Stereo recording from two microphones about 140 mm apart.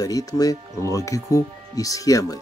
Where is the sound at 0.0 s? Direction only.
25° left (ahead or behind).